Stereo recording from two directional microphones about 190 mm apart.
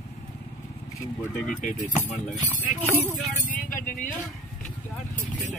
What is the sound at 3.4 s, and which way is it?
Speech, 45° left (ahead or behind).